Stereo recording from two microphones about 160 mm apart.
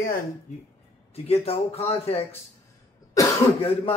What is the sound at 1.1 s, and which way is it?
A man's voice, 40° left (ahead or behind).